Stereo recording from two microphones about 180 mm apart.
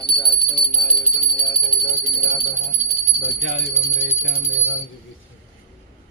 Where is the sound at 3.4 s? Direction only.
90° left.